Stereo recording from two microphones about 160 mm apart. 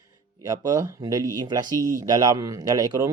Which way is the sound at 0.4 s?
20° right (ahead or behind).